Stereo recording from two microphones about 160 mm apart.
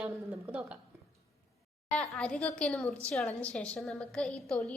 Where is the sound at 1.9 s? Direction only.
5° left (ahead or behind).